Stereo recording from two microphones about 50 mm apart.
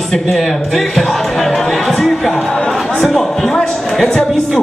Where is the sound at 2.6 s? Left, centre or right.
Centre.